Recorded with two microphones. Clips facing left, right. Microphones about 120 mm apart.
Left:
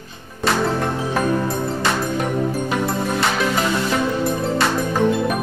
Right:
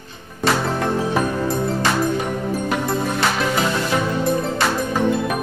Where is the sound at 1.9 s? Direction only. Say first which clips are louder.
Right 1 dB; centre (ahead or behind).